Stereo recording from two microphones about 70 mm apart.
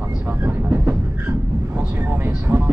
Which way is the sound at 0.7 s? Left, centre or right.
Right.